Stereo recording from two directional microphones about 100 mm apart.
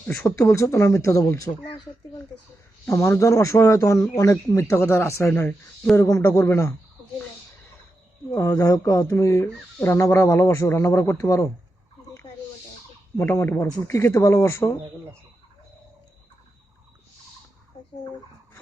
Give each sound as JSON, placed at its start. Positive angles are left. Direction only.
{"t": 0.1, "sound": "speech", "side_deg": 25}
{"t": 2.8, "sound": "speech", "side_deg": 30}
{"t": 6.0, "sound": "speech", "side_deg": 35}
{"t": 6.2, "sound": "speech", "side_deg": 20}
{"t": 8.3, "sound": "speech", "side_deg": 35}
{"t": 13.1, "sound": "speech", "side_deg": 30}